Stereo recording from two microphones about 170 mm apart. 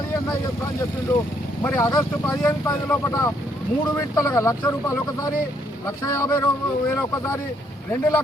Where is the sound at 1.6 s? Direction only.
15° left (ahead or behind).